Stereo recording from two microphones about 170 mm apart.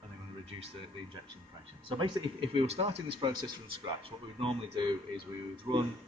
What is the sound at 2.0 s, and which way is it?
Speech, 30° right (ahead or behind).